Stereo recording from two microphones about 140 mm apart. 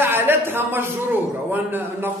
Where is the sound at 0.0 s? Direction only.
15° right (ahead or behind).